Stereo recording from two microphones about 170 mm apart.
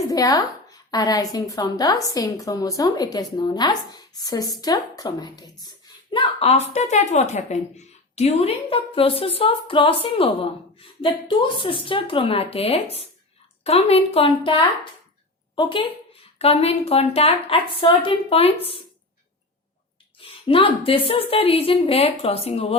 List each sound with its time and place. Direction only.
0.1 s a woman's voice: 20° left (ahead or behind)
16.4 s a woman's voice: 35° left (ahead or behind)
20.1 s a woman's voice: 30° left (ahead or behind)